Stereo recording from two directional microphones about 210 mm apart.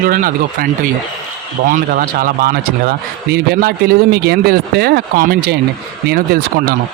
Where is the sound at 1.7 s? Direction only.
40° right (ahead or behind).